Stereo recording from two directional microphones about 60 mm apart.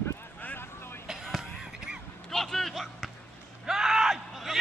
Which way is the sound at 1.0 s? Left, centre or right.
Centre.